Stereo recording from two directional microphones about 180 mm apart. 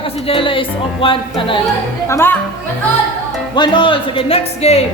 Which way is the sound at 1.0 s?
30° left (ahead or behind).